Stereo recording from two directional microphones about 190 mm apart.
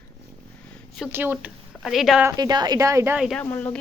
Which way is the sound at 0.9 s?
5° right (ahead or behind).